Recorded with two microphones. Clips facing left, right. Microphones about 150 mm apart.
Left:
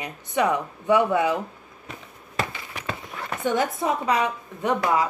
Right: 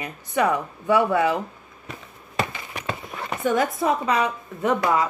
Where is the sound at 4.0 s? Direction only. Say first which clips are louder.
Right 1 dB; 15° left (ahead or behind).